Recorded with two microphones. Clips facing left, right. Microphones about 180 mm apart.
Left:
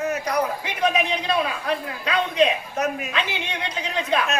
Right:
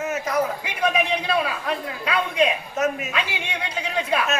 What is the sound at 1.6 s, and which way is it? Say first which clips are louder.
A man's voice: left 1 dB; 35° left (ahead or behind).